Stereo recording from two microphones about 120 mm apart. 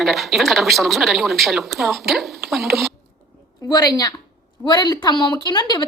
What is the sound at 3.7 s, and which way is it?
A woman's voice, 35° left (ahead or behind).